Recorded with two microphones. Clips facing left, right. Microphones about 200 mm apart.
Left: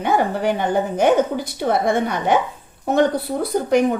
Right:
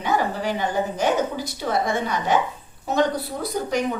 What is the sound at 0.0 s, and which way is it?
A woman's voice, 55° left (ahead or behind).